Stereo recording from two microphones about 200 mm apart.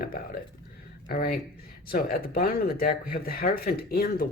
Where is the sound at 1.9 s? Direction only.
50° left (ahead or behind).